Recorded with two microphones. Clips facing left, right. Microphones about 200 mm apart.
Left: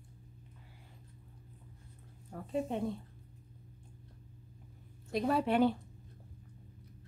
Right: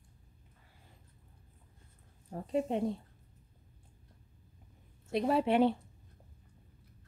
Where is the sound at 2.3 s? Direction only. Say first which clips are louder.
Right 3 dB; 30° right (ahead or behind).